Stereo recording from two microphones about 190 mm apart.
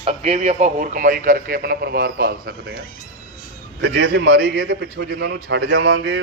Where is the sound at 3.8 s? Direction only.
65° right (ahead or behind).